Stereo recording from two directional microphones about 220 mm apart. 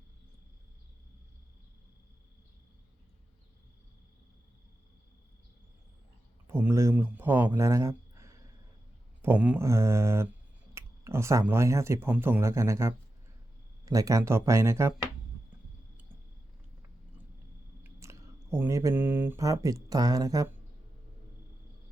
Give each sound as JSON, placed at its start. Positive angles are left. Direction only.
{"t": 6.5, "sound": "speech", "side_deg": -10}
{"t": 17.8, "sound": "speech", "side_deg": -10}